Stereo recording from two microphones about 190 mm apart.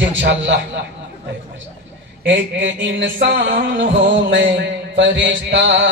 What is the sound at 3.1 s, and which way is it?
A man's voice, 60° right (ahead or behind).